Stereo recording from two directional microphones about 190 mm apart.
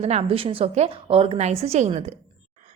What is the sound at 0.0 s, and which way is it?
A woman's voice, 30° right (ahead or behind).